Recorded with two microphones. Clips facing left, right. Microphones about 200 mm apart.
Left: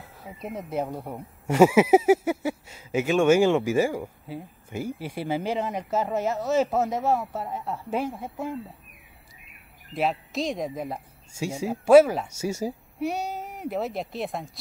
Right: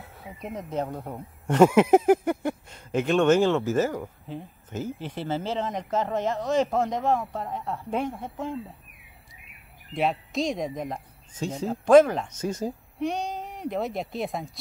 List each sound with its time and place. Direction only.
0.0 s a sound: centre (ahead or behind)
0.5 s speech: 10° left (ahead or behind)
9.9 s speech: centre (ahead or behind)